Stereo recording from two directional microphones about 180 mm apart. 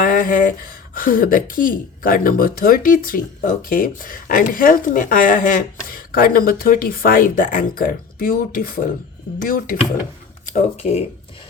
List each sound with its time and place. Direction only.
0.0 s speech: 50° left (ahead or behind)
10.4 s speech: 40° left (ahead or behind)